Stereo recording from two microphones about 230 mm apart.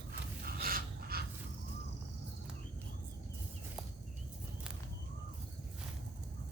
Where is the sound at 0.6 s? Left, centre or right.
Right.